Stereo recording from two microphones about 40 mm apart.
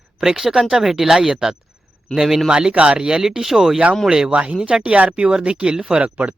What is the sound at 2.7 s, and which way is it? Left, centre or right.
Speech, right.